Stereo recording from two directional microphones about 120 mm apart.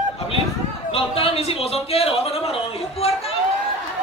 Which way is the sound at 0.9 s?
55° left (ahead or behind).